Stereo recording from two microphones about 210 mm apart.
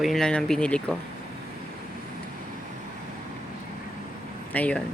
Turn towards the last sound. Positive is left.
turn(degrees=5)  # may be behind; listen again after turning